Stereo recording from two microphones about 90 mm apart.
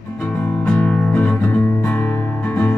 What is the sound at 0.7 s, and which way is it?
Music, 20° left (ahead or behind).